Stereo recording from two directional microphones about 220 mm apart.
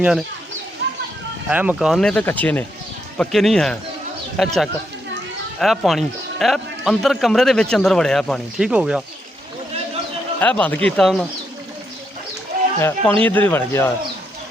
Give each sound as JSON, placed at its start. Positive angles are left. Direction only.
{"t": 0.8, "sound": "bird", "side_deg": -55}
{"t": 1.5, "sound": "speech", "side_deg": -5}
{"t": 10.4, "sound": "speech", "side_deg": 5}
{"t": 12.8, "sound": "speech", "side_deg": 10}